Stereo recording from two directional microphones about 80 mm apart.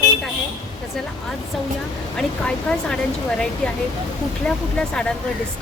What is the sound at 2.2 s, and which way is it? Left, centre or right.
Speech, centre.